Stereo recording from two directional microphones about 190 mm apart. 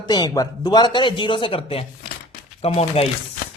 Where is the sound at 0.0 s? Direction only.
20° left (ahead or behind).